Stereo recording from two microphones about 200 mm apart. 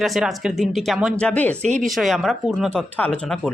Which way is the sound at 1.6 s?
35° right (ahead or behind).